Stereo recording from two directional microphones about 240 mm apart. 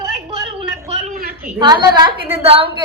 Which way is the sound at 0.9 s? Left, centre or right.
Right.